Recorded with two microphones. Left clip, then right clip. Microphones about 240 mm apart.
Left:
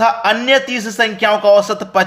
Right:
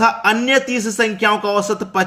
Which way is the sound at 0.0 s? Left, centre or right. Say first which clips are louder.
Left 2 dB; centre.